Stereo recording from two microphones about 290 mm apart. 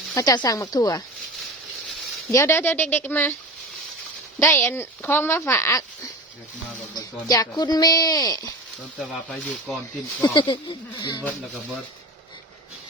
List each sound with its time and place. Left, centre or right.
0.1 s speech: centre
2.3 s speech: centre
4.4 s speech: centre
6.9 s speech: centre
9.0 s speech: centre
10.2 s speech: centre